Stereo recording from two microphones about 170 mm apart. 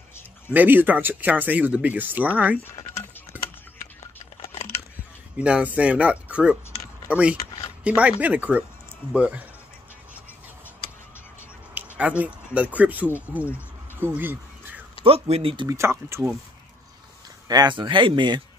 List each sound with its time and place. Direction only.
0.5 s speech: 10° right (ahead or behind)
3.3 s a sound: 10° right (ahead or behind)
5.4 s speech: 5° right (ahead or behind)
12.0 s speech: 10° right (ahead or behind)
13.3 s a sound: 10° right (ahead or behind)
15.0 s speech: 35° right (ahead or behind)
15.7 s speech: 15° right (ahead or behind)
17.5 s speech: 25° right (ahead or behind)